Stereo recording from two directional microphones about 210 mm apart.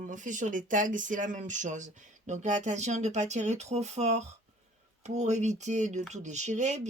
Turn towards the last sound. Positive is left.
turn(degrees=-35)  # may be behind; listen again after turning